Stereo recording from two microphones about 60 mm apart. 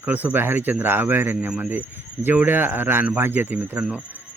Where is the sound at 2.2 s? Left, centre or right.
Right.